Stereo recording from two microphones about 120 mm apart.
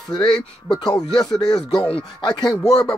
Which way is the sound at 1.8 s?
50° left (ahead or behind).